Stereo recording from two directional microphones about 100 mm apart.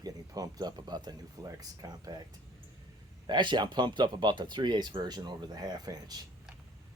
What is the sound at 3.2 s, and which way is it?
Speech, 50° right (ahead or behind).